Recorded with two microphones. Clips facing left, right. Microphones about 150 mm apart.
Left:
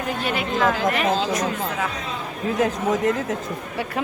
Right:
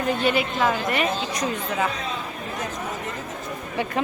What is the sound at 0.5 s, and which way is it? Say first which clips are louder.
Speech: left 3 dB; 90° left.